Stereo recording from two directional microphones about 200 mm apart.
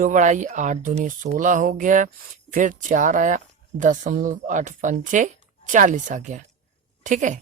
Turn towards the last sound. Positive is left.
turn(degrees=-40)  # may be behind; listen again after turning